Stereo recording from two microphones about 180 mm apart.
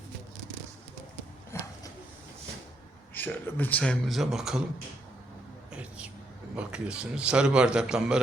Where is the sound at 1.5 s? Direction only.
15° left (ahead or behind).